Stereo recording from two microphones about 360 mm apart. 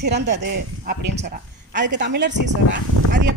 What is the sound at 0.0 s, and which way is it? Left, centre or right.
A man's voice, right.